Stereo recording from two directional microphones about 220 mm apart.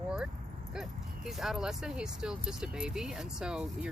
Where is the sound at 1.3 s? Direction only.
Centre (ahead or behind).